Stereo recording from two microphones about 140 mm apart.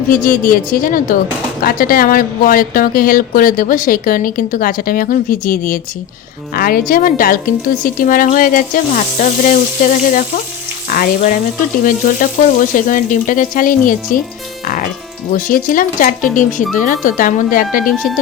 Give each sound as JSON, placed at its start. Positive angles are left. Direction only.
{"t": 0.1, "sound": "a woman's voice", "side_deg": 85}
{"t": 6.5, "sound": "speech", "side_deg": 90}
{"t": 7.9, "sound": "sizzle", "side_deg": 80}
{"t": 10.8, "sound": "frying", "side_deg": 85}
{"t": 11.8, "sound": "sizzle", "side_deg": 75}
{"t": 15.3, "sound": "sizzle", "side_deg": 85}